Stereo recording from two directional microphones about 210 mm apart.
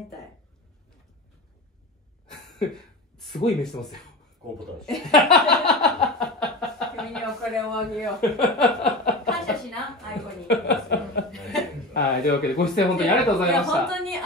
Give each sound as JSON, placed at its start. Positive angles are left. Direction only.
{"t": 2.5, "sound": "a sound", "side_deg": 0}
{"t": 4.8, "sound": "a sound", "side_deg": 0}
{"t": 7.0, "sound": "chuckle", "side_deg": 0}
{"t": 10.4, "sound": "chuckle", "side_deg": 50}
{"t": 11.3, "sound": "chuckle", "side_deg": 0}
{"t": 11.9, "sound": "speech", "side_deg": 50}
{"t": 12.6, "sound": "speech", "side_deg": 0}